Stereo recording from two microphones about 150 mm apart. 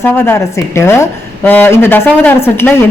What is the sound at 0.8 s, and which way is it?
Speech, 15° left (ahead or behind).